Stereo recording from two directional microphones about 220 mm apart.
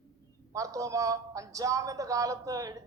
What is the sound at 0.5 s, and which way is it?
A woman's voice, 15° right (ahead or behind).